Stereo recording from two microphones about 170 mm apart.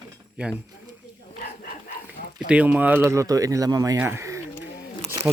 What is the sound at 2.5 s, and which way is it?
Speech, 10° right (ahead or behind).